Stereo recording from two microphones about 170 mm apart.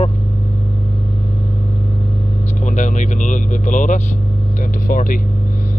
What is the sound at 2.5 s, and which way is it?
Speech, 45° left (ahead or behind).